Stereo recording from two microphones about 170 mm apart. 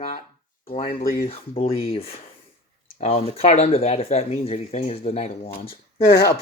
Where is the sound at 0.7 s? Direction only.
35° left (ahead or behind).